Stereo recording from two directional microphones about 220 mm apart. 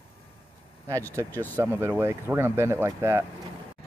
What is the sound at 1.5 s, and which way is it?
Speech, 10° right (ahead or behind).